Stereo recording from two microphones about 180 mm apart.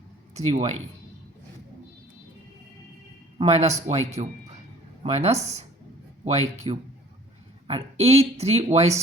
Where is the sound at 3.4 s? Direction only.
35° right (ahead or behind).